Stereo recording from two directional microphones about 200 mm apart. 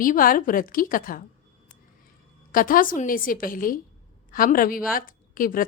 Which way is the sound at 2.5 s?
45° left (ahead or behind).